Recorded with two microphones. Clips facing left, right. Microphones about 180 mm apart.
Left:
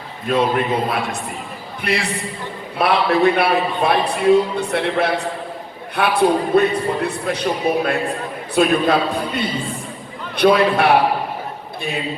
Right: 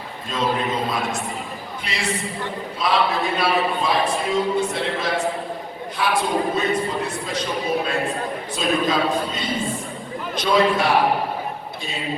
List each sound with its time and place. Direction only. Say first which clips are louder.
0.3 s a man's voice: left 6 dB; 65° left (ahead or behind)